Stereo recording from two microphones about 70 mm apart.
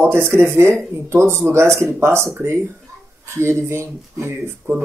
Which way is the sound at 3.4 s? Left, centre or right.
Right.